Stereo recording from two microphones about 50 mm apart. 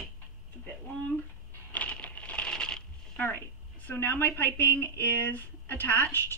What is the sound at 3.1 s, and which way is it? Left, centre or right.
A woman's voice, left.